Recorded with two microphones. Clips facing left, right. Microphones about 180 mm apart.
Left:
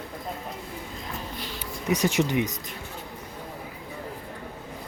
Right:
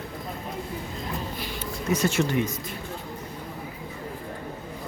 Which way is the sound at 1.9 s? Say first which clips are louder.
Even; 15° left (ahead or behind).